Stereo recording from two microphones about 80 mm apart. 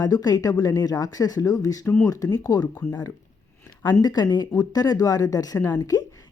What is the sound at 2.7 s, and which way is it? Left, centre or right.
Speech, left.